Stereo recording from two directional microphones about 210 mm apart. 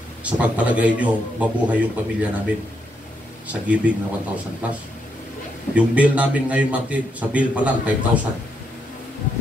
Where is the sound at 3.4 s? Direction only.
5° right (ahead or behind).